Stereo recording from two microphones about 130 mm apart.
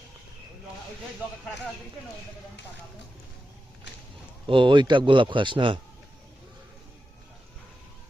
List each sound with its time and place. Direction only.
4.4 s a man's voice: 40° right (ahead or behind)